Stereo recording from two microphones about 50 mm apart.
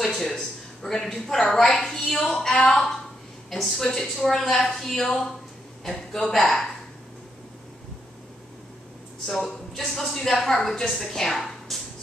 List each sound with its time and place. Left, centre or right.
0.0 s a woman's voice: centre
9.2 s a woman's voice: centre